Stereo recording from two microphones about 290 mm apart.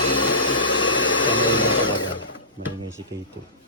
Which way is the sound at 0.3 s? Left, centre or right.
Left.